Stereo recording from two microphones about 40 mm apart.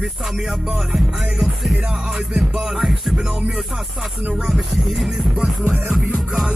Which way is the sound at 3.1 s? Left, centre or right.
Centre.